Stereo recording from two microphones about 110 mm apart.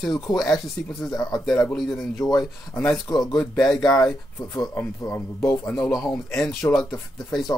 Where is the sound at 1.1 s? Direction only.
35° left (ahead or behind).